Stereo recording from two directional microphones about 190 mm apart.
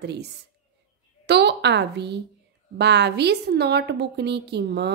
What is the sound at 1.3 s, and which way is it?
A woman's voice, 60° right (ahead or behind).